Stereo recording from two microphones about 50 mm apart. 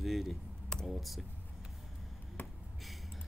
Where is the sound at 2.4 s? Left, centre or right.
Centre.